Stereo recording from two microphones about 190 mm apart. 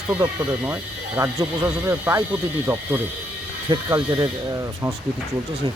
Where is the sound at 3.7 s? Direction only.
25° right (ahead or behind).